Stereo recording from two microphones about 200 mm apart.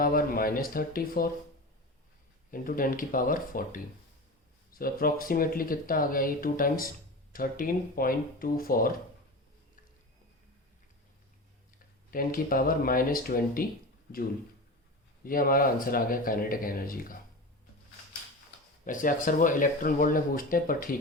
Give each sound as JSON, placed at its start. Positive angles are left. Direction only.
{"t": 0.0, "sound": "speech", "side_deg": 45}
{"t": 2.5, "sound": "speech", "side_deg": 45}
{"t": 12.1, "sound": "speech", "side_deg": 45}
{"t": 15.2, "sound": "speech", "side_deg": 45}
{"t": 18.9, "sound": "speech", "side_deg": 40}